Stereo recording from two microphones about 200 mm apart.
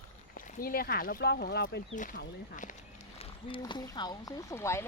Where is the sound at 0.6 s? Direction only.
50° left (ahead or behind).